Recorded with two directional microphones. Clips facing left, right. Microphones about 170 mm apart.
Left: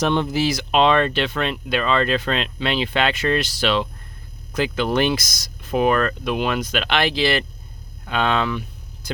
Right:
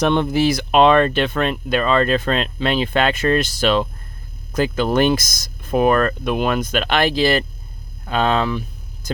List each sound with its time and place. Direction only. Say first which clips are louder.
0.0 s speech: right 3 dB; 55° right (ahead or behind); by 8.6 s 40° right (ahead or behind)